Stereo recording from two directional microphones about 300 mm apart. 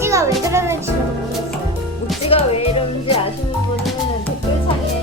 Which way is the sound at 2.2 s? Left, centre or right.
Centre.